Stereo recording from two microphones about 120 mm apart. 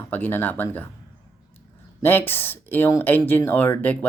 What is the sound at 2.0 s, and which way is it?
Speech, 15° left (ahead or behind).